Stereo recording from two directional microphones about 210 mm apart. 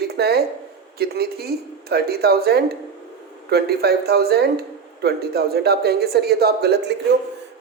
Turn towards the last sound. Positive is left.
turn(degrees=-50)  # may be behind; listen again after turning